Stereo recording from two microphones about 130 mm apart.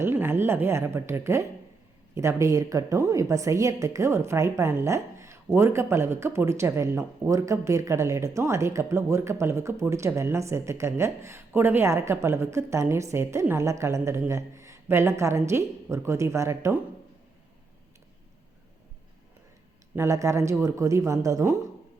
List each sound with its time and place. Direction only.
0.0 s a woman's voice: 15° right (ahead or behind)
20.0 s a woman's voice: 25° right (ahead or behind)